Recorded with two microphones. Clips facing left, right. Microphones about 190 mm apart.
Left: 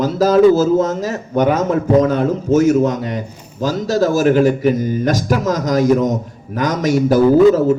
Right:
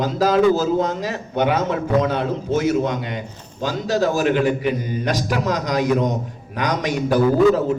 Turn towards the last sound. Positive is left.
turn(degrees=40)  # may be behind; listen again after turning